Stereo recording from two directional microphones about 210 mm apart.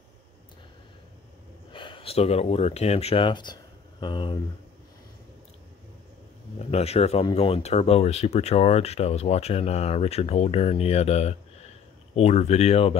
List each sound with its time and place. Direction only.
1.7 s speech: 25° left (ahead or behind)
6.6 s speech: 30° left (ahead or behind)